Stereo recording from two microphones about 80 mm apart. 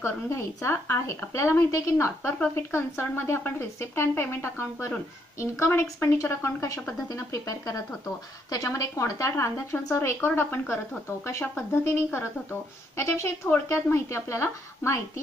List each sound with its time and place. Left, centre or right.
0.0 s speech: left